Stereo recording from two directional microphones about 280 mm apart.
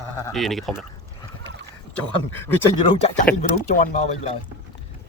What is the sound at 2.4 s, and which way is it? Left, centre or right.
Speech, centre.